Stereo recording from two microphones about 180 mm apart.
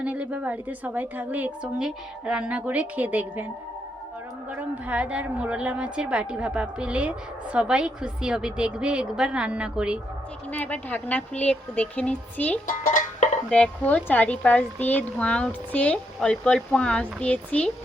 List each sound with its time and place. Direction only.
0.0 s a woman's voice: 5° right (ahead or behind)
4.9 s a woman's voice: 5° right (ahead or behind)
10.5 s a woman's voice: 10° left (ahead or behind)
12.6 s speech: 45° left (ahead or behind)
13.5 s a woman's voice: 5° left (ahead or behind)